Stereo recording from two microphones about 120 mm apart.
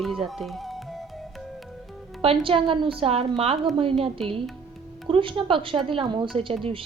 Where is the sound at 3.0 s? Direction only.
55° right (ahead or behind).